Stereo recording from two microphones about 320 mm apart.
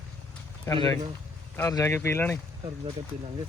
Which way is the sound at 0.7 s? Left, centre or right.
Centre.